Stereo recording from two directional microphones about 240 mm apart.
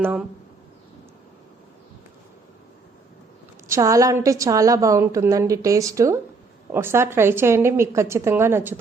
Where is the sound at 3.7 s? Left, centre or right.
Centre.